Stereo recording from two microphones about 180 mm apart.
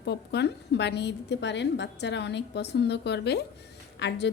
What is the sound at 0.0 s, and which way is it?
A woman's voice, 70° left (ahead or behind).